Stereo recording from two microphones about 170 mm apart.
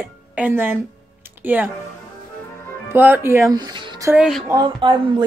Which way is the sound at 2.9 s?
10° right (ahead or behind).